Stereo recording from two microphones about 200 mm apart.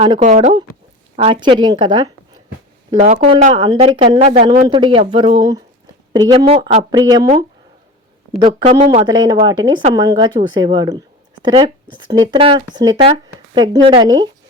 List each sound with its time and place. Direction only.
0.2 s speech: 35° right (ahead or behind); by 2.4 s 20° right (ahead or behind)
3.0 s speech: 35° right (ahead or behind)
8.4 s speech: 25° right (ahead or behind)